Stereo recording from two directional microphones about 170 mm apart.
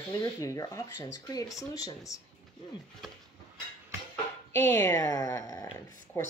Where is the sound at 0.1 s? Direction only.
20° left (ahead or behind).